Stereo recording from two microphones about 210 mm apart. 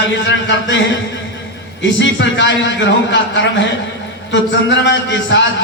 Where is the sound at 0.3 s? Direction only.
60° left (ahead or behind).